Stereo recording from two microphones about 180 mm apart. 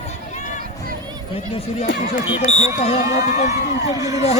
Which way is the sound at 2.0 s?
45° left (ahead or behind).